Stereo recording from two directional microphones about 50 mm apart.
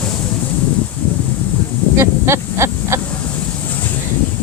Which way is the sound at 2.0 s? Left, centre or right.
Right.